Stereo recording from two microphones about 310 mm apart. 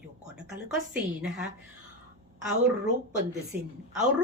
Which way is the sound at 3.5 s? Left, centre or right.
Right.